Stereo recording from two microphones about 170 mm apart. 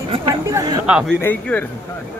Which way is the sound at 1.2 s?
10° left (ahead or behind).